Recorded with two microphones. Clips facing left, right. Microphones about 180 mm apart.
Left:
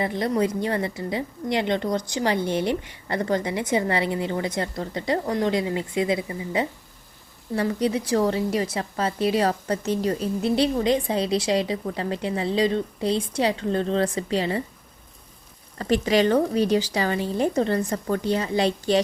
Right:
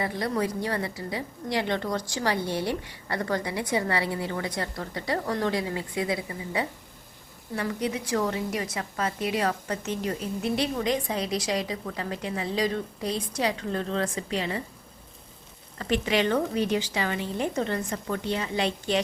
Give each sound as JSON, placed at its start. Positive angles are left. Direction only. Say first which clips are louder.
{"t": 0.0, "sound": "a woman's voice", "louder": "left 4 dB", "side_deg": 20}
{"t": 15.8, "sound": "a woman's voice", "louder": "left 5 dB", "side_deg": 35}